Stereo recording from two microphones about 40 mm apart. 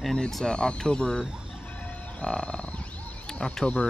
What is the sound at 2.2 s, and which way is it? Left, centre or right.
Speech, left.